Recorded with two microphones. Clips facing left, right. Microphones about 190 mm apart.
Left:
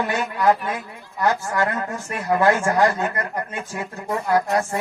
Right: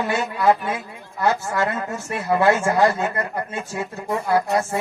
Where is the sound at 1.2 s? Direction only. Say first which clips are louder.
Even; 15° right (ahead or behind).